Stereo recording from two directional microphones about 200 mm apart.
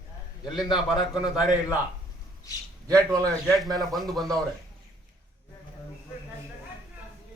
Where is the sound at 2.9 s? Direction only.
15° right (ahead or behind).